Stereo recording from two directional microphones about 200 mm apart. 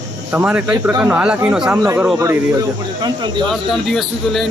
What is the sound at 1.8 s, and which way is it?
Speech, 15° right (ahead or behind).